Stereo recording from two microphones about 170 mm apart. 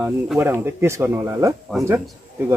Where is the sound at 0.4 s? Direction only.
15° right (ahead or behind).